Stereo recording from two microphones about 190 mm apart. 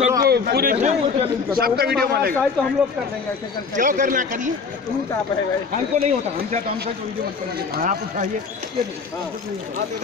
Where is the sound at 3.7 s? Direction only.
45° right (ahead or behind).